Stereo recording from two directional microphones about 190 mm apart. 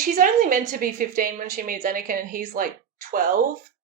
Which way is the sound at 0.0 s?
45° right (ahead or behind).